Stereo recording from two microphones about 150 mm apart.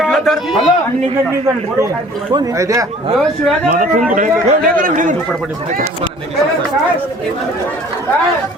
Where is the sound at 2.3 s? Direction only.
20° right (ahead or behind).